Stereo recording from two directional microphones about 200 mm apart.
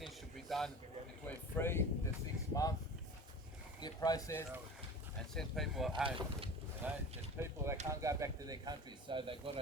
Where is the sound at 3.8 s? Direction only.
20° left (ahead or behind).